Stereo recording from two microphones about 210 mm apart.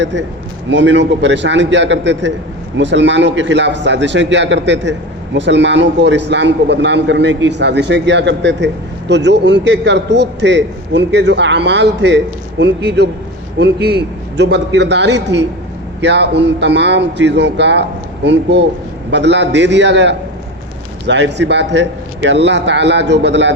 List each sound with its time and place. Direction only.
0.0 s a man's voice: 60° right (ahead or behind)